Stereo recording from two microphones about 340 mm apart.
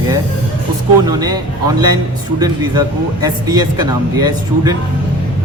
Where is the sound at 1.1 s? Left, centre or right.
Centre.